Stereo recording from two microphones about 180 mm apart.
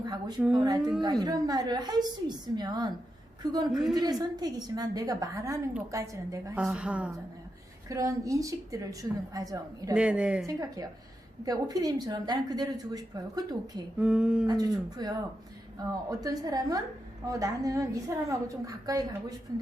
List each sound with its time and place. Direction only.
0.0 s speech: 20° right (ahead or behind)
0.8 s a woman's voice: 5° right (ahead or behind)
1.0 s a woman's voice: 20° right (ahead or behind)
3.7 s a woman's voice: centre (ahead or behind)
3.9 s a woman's voice: 20° right (ahead or behind)
6.6 s a woman's voice: 5° right (ahead or behind)
7.9 s a woman's voice: 20° right (ahead or behind)
9.9 s a woman's voice: 5° right (ahead or behind)
10.4 s a woman's voice: 20° right (ahead or behind)
14.0 s a woman's voice: 5° right (ahead or behind)
14.4 s a woman's voice: 20° right (ahead or behind)